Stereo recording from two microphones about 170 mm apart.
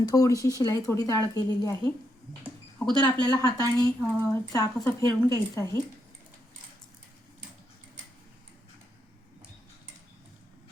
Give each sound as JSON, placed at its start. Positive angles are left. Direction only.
{"t": 0.0, "sound": "a woman's voice", "side_deg": 20}
{"t": 3.0, "sound": "a woman's voice", "side_deg": 20}